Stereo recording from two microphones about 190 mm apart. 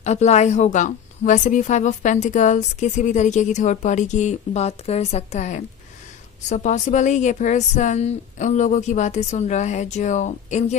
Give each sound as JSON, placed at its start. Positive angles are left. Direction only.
{"t": 0.0, "sound": "a woman's voice", "side_deg": 35}